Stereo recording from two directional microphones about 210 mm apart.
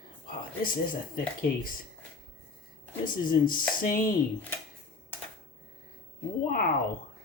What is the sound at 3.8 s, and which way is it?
Speech, 40° left (ahead or behind).